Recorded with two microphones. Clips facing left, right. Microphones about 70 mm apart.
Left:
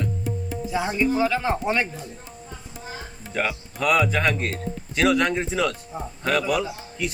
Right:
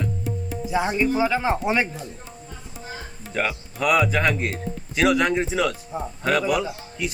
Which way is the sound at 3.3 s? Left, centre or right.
Centre.